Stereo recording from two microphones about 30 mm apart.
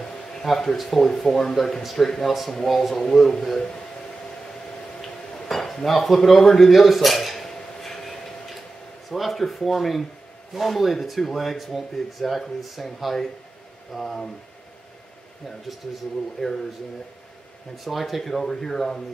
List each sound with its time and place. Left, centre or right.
0.0 s a sound: centre
0.5 s speech: centre
2.7 s speech: centre
3.1 s speech: centre
5.5 s cutlery: centre
5.9 s speech: centre
7.2 s cutlery: centre
9.1 s speech: centre
13.9 s speech: centre
16.4 s speech: centre
17.8 s speech: centre
18.4 s speech: centre